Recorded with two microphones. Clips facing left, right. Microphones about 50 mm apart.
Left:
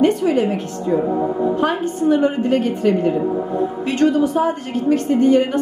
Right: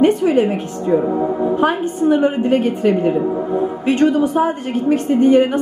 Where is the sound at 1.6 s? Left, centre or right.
Centre.